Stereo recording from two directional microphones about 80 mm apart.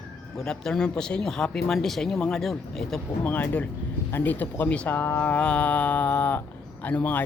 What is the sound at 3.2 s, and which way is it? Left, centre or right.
Speech, centre.